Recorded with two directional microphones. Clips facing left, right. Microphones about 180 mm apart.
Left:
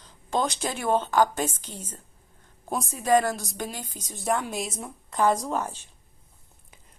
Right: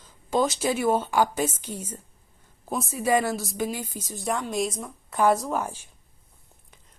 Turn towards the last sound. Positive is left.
turn(degrees=-10)  # may be behind; listen again after turning